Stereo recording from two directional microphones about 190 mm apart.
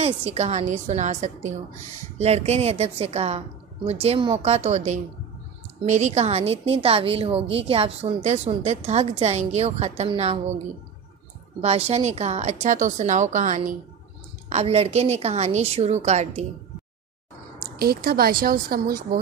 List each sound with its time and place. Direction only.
0.0 s a woman's voice: 35° right (ahead or behind)
11.6 s a woman's voice: 35° right (ahead or behind)
17.6 s a woman's voice: 55° right (ahead or behind)